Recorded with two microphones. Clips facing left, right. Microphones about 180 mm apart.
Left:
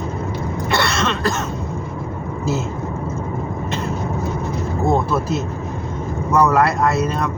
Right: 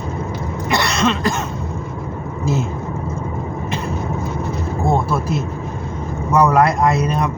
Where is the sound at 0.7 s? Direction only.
15° right (ahead or behind).